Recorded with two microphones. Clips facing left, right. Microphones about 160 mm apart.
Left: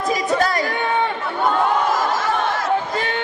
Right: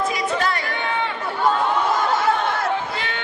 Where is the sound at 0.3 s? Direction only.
40° left (ahead or behind).